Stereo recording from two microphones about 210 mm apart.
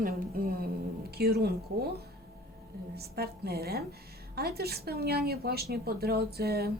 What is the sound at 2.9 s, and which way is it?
Speech, 50° right (ahead or behind).